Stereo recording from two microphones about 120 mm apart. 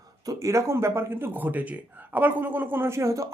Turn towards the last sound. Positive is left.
turn(degrees=-25)  # may be behind; listen again after turning